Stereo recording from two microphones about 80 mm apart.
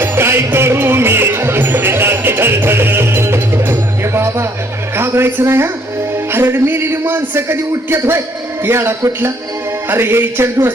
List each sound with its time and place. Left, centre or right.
0.0 s music: right
4.9 s speech: right